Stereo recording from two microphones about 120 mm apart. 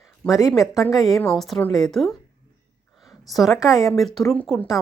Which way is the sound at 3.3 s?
Centre (ahead or behind).